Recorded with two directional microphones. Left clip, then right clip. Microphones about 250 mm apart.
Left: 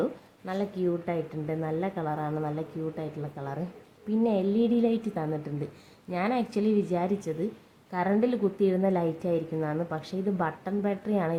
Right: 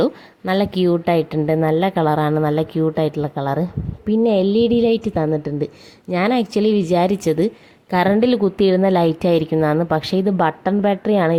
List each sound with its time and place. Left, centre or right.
0.0 s a woman's voice: right